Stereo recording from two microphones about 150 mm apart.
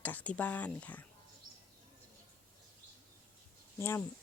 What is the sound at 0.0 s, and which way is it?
Speech, 10° left (ahead or behind).